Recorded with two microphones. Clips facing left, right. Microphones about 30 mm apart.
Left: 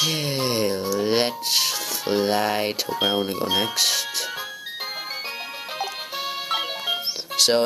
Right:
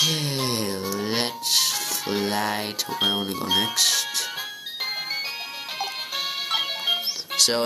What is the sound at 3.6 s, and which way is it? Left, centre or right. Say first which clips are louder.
Speech: even; centre.